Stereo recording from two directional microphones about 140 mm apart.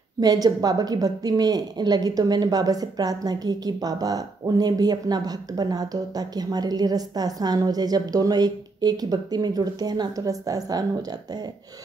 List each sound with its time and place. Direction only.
0.2 s a woman's voice: 25° right (ahead or behind)